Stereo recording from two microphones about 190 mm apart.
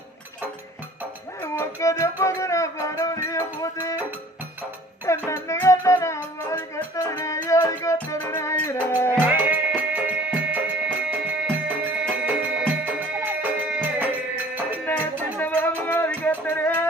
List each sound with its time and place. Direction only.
1.4 s music: 15° left (ahead or behind)
5.0 s music: 15° left (ahead or behind)
9.2 s music: 10° right (ahead or behind)
15.3 s music: 10° left (ahead or behind)